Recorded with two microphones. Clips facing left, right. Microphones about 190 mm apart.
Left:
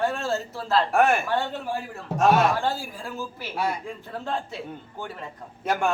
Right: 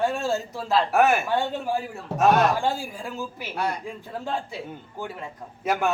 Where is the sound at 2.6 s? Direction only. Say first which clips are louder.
Right 1 dB; 15° right (ahead or behind).